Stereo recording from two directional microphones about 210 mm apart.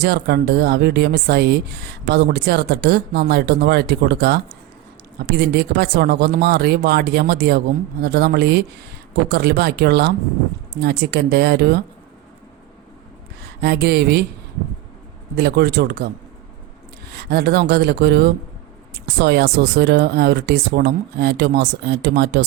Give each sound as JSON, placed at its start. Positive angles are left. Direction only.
{"t": 0.0, "sound": "a woman's voice", "side_deg": -50}
{"t": 13.4, "sound": "speech", "side_deg": -50}
{"t": 15.4, "sound": "a woman's voice", "side_deg": -50}
{"t": 17.1, "sound": "a woman's voice", "side_deg": -50}